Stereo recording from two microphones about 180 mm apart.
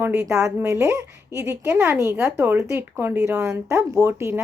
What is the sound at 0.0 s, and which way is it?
A woman's voice, 15° right (ahead or behind).